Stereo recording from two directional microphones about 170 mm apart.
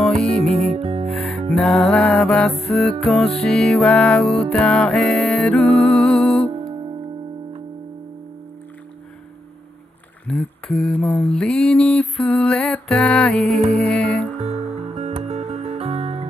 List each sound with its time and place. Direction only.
0.0 s music: centre (ahead or behind)
0.6 s music: 35° right (ahead or behind)
1.1 s music: centre (ahead or behind)
10.2 s music: 5° left (ahead or behind)
14.4 s music: 35° right (ahead or behind)